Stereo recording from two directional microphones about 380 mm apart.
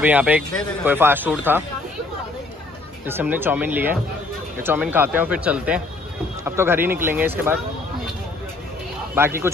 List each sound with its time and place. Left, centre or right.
0.0 s a man's voice: centre
3.1 s a man's voice: centre
9.1 s speech: centre